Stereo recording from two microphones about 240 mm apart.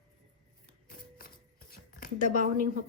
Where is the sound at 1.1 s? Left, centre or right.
Left.